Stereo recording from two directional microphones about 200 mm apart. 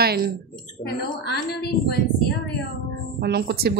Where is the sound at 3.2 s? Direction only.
55° right (ahead or behind).